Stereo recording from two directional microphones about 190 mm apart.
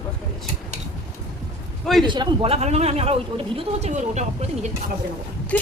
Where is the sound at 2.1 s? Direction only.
25° right (ahead or behind).